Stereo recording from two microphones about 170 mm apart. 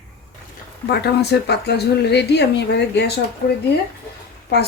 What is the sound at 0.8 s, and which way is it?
Speech, 75° left (ahead or behind).